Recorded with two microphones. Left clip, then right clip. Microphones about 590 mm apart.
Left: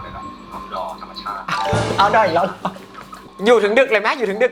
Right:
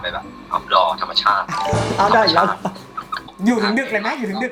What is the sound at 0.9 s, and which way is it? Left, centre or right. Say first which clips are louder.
Music: right 11 dB; right.